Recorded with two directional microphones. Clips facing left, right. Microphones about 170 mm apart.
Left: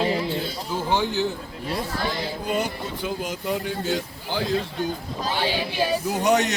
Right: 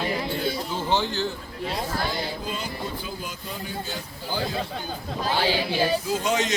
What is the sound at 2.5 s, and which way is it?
Speech, 75° left (ahead or behind).